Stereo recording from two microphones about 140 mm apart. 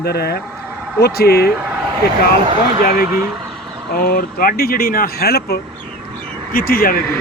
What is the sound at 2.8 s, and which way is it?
Speech, 90° left.